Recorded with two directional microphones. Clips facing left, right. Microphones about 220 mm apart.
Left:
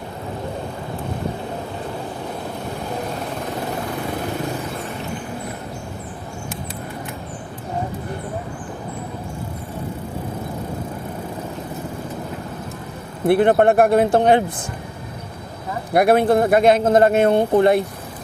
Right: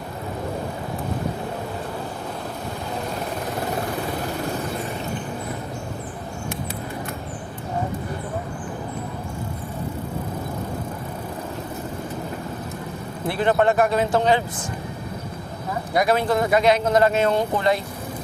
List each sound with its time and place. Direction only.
13.2 s speech: 55° left (ahead or behind)
15.9 s speech: 55° left (ahead or behind)